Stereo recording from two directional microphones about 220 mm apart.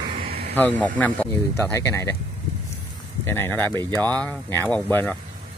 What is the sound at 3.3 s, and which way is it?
Speech, 10° left (ahead or behind).